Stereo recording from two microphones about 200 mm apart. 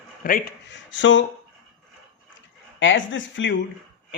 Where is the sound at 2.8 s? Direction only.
70° left (ahead or behind).